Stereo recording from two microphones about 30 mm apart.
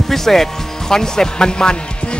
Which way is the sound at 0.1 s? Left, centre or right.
Centre.